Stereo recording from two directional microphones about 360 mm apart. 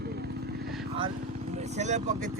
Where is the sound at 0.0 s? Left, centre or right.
Right.